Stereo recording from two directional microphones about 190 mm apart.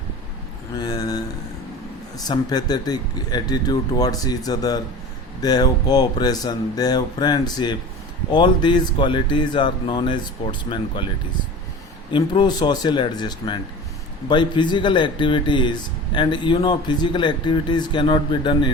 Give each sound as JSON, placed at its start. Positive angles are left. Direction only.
{"t": 0.8, "sound": "a sound", "side_deg": 20}
{"t": 2.1, "sound": "a man's voice", "side_deg": 20}
{"t": 12.1, "sound": "a man's voice", "side_deg": 25}